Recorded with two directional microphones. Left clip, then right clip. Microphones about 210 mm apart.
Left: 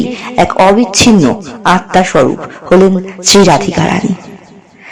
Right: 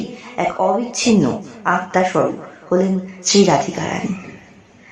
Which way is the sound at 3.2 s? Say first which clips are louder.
Left 8 dB; 40° left (ahead or behind).